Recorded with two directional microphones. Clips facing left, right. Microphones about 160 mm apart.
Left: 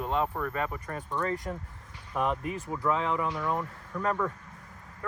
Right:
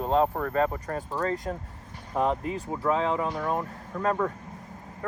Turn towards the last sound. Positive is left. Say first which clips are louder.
# right 3 dB
turn(degrees=-30)  # may be behind; listen again after turning